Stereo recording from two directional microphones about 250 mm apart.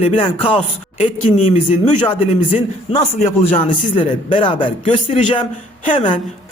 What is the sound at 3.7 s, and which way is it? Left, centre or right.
Speech, centre.